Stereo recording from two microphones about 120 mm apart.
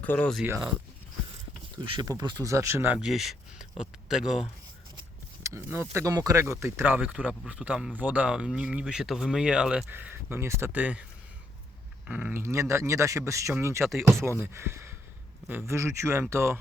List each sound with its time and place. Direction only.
0.0 s speech: 10° left (ahead or behind)
1.8 s speech: 40° right (ahead or behind); by 2.9 s 25° right (ahead or behind)
2.9 s speech: 5° right (ahead or behind)
5.4 s a sound: 20° right (ahead or behind)
5.9 s speech: 25° right (ahead or behind)
12.0 s speech: 10° right (ahead or behind)
12.3 s speech: 25° right (ahead or behind)